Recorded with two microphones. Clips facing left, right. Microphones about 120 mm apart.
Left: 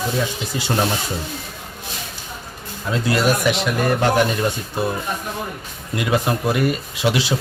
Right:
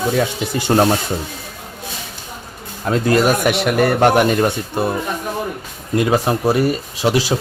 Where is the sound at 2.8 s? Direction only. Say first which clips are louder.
Right 4 dB; 45° right (ahead or behind).